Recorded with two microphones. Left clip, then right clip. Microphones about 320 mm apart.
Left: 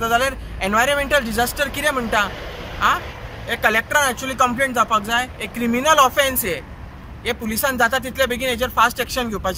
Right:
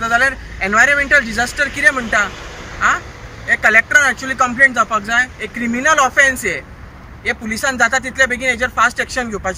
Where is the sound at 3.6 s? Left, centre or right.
Centre.